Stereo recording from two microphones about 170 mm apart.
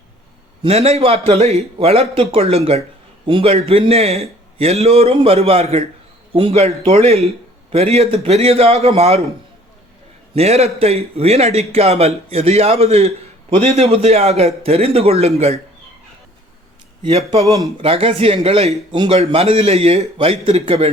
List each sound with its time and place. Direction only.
0.6 s a man's voice: 40° right (ahead or behind)
10.3 s a man's voice: 40° right (ahead or behind)
17.0 s a man's voice: 35° right (ahead or behind)
17.5 s speech: 20° right (ahead or behind)
17.8 s a man's voice: 35° right (ahead or behind)